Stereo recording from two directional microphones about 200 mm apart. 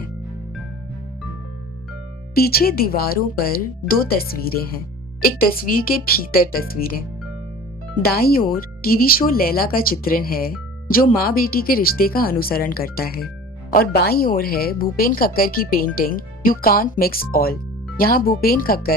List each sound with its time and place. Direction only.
2.3 s a woman's voice: 50° left (ahead or behind)
8.0 s a woman's voice: 50° left (ahead or behind)